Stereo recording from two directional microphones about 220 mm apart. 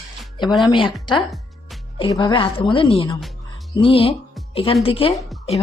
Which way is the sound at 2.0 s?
15° left (ahead or behind).